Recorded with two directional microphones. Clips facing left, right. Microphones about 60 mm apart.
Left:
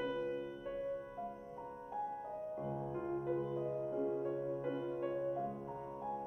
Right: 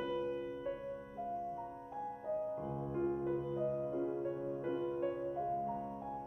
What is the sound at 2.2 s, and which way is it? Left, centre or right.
Music, centre.